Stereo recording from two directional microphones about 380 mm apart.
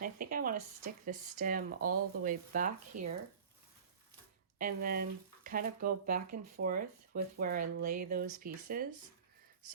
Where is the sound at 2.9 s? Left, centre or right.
Right.